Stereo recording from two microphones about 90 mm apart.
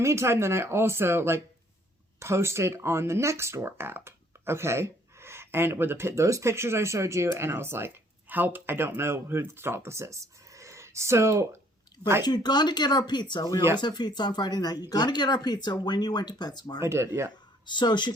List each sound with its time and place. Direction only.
0.0 s speech: 30° right (ahead or behind)
12.2 s speech: 50° left (ahead or behind)
16.8 s speech: 30° right (ahead or behind)
17.3 s speech: 55° left (ahead or behind)